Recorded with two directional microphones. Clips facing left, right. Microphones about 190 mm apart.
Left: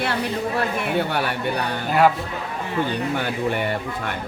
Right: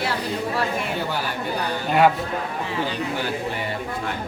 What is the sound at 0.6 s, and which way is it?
Speech, 65° left (ahead or behind).